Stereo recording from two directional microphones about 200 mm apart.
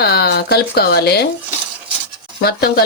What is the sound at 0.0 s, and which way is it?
Speech, 50° left (ahead or behind).